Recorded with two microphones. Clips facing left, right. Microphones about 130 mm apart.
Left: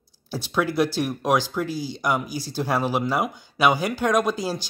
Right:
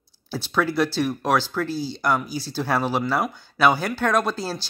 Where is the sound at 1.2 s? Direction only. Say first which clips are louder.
Left 3 dB; 10° left (ahead or behind).